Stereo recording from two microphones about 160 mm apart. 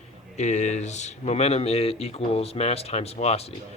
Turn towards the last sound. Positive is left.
turn(degrees=40)  # may be behind; listen again after turning